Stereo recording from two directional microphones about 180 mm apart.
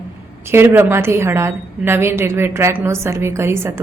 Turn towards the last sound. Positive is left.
turn(degrees=-15)  # may be behind; listen again after turning